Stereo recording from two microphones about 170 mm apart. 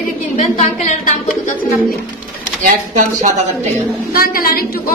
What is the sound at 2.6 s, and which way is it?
A woman's voice, 50° right (ahead or behind).